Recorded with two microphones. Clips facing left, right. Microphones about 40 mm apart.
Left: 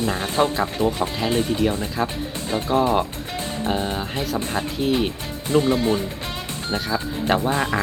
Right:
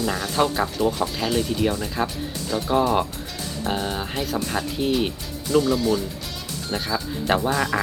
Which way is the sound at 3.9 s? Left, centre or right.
Centre.